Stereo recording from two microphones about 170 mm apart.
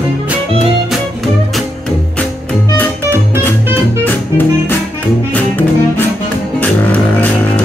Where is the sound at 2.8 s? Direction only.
10° left (ahead or behind).